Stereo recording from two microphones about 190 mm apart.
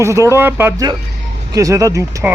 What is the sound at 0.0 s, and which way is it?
Speech, 15° right (ahead or behind).